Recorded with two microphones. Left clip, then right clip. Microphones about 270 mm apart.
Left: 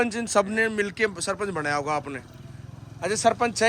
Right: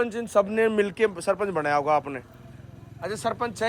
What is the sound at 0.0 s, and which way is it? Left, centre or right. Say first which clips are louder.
Speech: even; centre.